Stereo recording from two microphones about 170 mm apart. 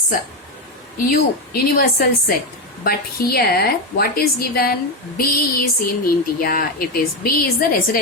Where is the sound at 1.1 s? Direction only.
60° left (ahead or behind).